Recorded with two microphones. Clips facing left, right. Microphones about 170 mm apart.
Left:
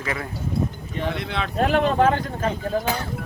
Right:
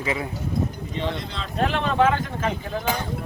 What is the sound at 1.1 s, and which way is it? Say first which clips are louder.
Speech: left 5 dB; 65° left (ahead or behind).